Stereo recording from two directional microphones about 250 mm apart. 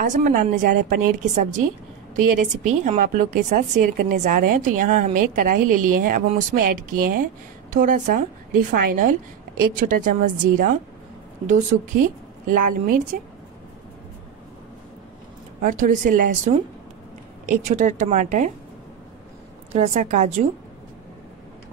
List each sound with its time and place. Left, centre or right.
0.0 s a woman's voice: right
15.6 s a woman's voice: right
19.7 s speech: right